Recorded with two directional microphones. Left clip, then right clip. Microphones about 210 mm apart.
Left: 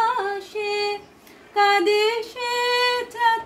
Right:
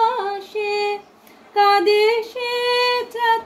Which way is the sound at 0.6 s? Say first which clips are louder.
Right 4 dB; 15° left (ahead or behind).